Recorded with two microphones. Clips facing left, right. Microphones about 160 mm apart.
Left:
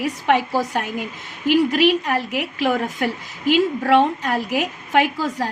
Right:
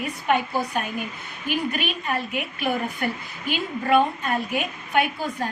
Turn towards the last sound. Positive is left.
turn(degrees=90)